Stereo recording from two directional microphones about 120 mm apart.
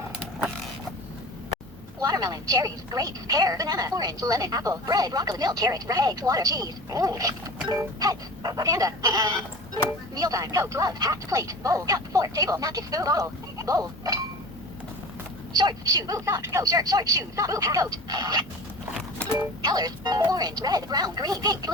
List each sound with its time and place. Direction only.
2.0 s speech: 30° right (ahead or behind)
7.7 s music: 30° right (ahead or behind)
15.5 s speech: 35° right (ahead or behind)